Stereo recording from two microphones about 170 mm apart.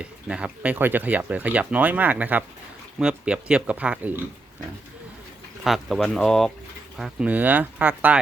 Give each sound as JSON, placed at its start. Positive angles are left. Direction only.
{"t": 0.0, "sound": "speech", "side_deg": -5}
{"t": 5.6, "sound": "speech", "side_deg": 0}